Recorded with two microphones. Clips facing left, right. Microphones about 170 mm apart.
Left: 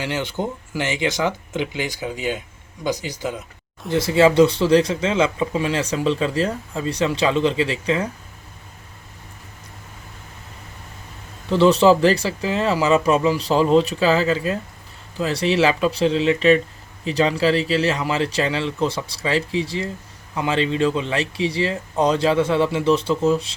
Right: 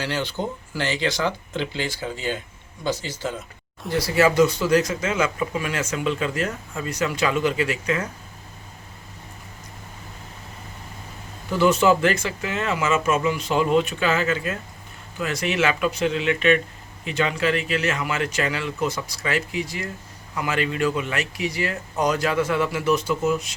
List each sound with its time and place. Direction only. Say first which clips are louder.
0.0 s speech: left 2 dB; 20° left (ahead or behind)
11.4 s speech: left 4 dB; 30° left (ahead or behind)